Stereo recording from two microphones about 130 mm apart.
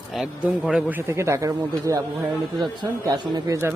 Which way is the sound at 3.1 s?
30° right (ahead or behind).